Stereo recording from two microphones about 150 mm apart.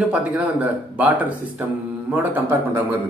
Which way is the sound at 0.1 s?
10° right (ahead or behind).